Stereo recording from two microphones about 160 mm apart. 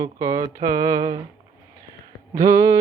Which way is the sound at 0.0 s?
20° right (ahead or behind).